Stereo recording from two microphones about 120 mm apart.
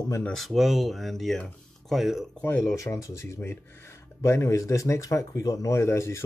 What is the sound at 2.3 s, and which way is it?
Speech, 15° left (ahead or behind).